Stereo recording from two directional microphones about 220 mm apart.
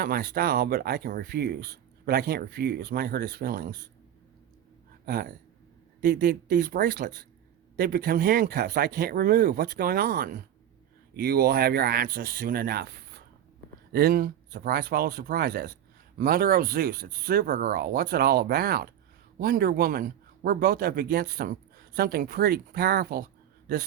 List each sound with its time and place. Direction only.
0.0 s speech: 40° right (ahead or behind)
5.0 s speech: 45° right (ahead or behind)